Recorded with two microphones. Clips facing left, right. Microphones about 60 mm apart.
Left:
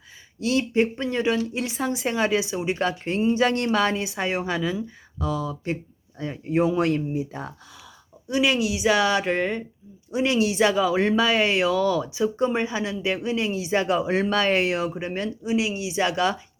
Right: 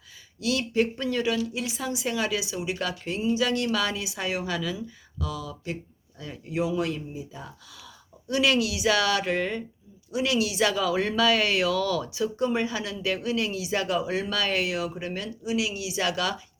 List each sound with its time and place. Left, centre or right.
0.3 s a woman's voice: left
8.3 s speech: centre